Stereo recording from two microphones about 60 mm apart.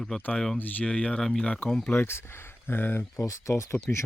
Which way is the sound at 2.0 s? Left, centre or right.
Left.